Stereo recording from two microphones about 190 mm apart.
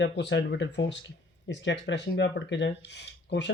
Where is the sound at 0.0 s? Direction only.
70° left (ahead or behind).